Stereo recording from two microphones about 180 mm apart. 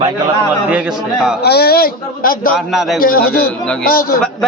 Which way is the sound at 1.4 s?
60° left (ahead or behind).